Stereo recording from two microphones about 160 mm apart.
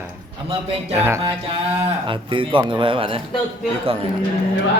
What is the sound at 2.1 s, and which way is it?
A man's voice, 30° right (ahead or behind).